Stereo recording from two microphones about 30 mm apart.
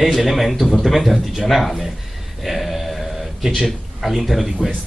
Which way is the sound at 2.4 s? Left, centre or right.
Centre.